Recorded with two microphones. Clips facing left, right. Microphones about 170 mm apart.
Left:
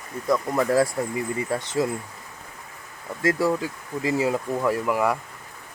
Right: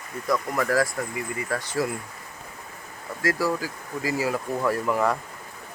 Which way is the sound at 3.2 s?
25° left (ahead or behind).